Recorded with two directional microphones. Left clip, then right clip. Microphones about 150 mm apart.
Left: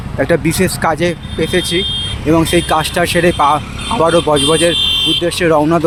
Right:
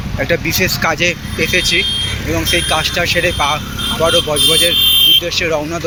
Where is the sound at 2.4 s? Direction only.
60° left (ahead or behind).